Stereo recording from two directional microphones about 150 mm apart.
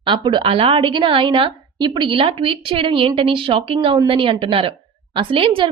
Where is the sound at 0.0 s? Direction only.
30° right (ahead or behind).